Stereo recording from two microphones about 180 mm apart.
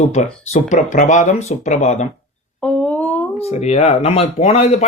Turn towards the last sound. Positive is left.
turn(degrees=35)  # may be behind; listen again after turning